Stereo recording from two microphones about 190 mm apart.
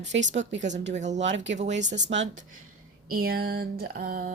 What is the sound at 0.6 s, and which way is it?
Speech, 40° right (ahead or behind).